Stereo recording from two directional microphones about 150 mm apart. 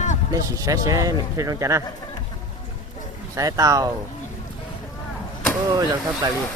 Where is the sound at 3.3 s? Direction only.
25° right (ahead or behind).